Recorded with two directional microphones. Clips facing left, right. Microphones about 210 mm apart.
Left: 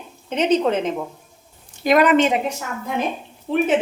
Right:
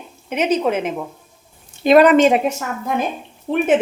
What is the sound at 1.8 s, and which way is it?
Speech, 30° right (ahead or behind).